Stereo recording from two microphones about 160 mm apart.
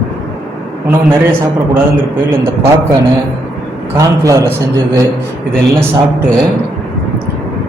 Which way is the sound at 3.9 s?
20° right (ahead or behind).